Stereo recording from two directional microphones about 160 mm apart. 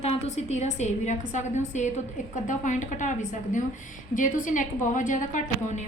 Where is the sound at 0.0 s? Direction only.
40° left (ahead or behind).